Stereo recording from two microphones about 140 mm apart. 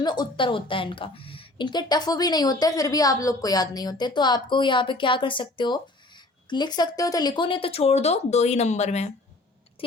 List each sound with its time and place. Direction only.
0.0 s a woman's voice: 30° left (ahead or behind); by 9.1 s 55° left (ahead or behind)